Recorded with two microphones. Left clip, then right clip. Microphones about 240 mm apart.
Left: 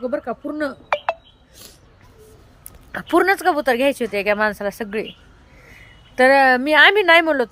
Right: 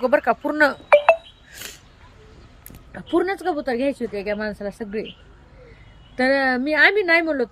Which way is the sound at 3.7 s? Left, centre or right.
Left.